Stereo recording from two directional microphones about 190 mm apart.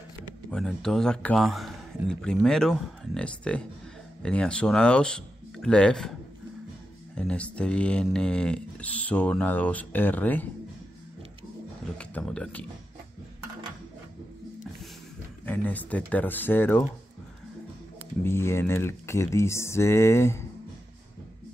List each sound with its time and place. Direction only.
0.5 s speech: 5° left (ahead or behind)
7.2 s speech: 5° left (ahead or behind)
12.0 s speech: 5° left (ahead or behind)
15.4 s speech: 10° left (ahead or behind)
18.2 s speech: 15° left (ahead or behind)